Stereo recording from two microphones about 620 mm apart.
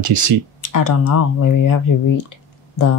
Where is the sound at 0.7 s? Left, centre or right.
Left.